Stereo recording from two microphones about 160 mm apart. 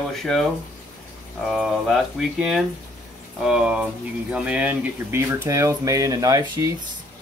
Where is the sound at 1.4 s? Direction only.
Centre (ahead or behind); by 6.7 s 20° right (ahead or behind).